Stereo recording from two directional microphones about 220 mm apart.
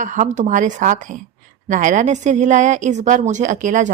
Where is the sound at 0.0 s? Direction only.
35° right (ahead or behind).